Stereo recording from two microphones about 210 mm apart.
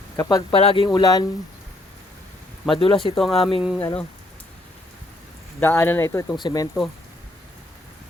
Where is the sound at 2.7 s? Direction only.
25° left (ahead or behind).